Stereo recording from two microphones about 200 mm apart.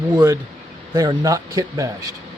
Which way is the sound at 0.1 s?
20° right (ahead or behind).